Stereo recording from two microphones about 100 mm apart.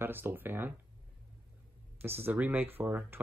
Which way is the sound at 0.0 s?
20° right (ahead or behind).